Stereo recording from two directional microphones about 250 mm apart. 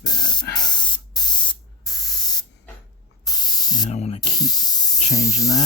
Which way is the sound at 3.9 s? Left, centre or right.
Left.